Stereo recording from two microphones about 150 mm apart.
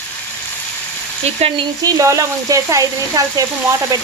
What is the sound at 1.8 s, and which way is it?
Speech, 25° right (ahead or behind).